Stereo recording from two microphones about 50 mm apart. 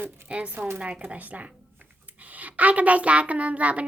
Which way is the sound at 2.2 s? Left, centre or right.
Right.